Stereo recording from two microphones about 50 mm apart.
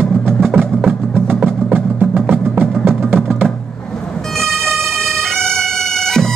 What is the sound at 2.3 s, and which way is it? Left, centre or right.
Music, right.